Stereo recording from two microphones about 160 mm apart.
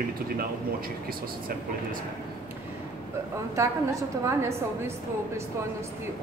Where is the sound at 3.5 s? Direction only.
20° right (ahead or behind).